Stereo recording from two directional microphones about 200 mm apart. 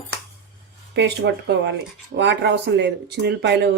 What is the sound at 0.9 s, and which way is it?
Speech, 60° right (ahead or behind).